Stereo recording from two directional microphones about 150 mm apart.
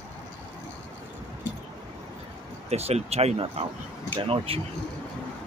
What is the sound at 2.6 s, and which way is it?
Speech, 45° right (ahead or behind).